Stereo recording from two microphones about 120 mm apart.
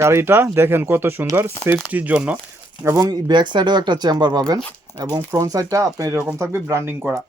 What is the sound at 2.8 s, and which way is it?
Speech, 25° right (ahead or behind).